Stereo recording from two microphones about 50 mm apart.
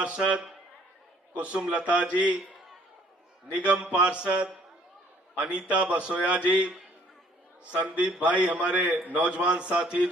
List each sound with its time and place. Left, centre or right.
0.0 s a man's voice: right
3.5 s a man's voice: right
5.5 s a man's voice: right